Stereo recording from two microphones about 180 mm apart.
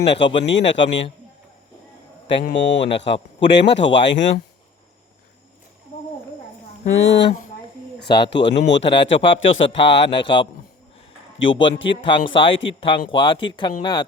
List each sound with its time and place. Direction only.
0.0 s speech: 75° left (ahead or behind)
0.4 s speech: 90° left
2.4 s speech: 80° left
6.8 s speech: 85° left
8.3 s speech: 80° left
10.1 s speech: 25° left (ahead or behind)
11.6 s speech: 90° left
11.9 s speech: 25° left (ahead or behind)